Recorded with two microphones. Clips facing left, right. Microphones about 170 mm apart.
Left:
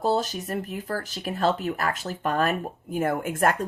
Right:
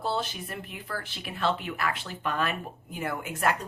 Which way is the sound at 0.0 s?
40° left (ahead or behind).